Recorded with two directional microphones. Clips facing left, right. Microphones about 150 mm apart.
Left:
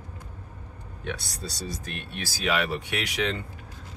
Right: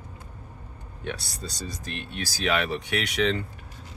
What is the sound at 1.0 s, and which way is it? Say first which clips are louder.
Speech: even; centre (ahead or behind).